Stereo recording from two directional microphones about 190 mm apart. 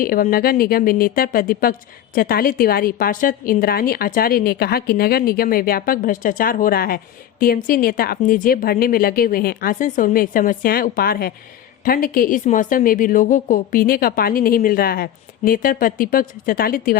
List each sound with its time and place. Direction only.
0.0 s a woman's voice: 50° left (ahead or behind)